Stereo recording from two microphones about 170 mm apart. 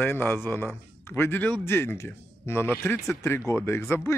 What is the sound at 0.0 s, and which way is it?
Speech, 10° left (ahead or behind).